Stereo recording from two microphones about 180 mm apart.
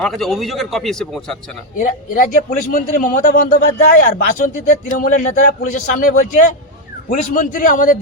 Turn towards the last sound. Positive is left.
turn(degrees=45)  # may be behind; listen again after turning